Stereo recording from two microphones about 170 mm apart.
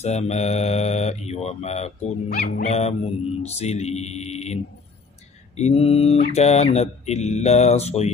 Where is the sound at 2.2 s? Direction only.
55° left (ahead or behind).